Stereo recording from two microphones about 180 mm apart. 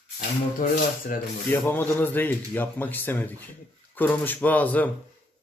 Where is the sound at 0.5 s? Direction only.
50° left (ahead or behind).